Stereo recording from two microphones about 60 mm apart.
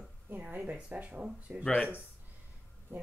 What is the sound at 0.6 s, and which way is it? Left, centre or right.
A woman's voice, right.